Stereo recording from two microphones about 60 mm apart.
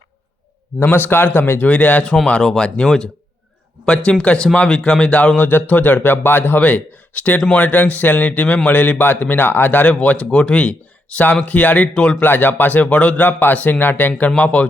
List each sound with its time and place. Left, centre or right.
0.8 s speech: left
5.5 s speech: left
12.2 s speech: left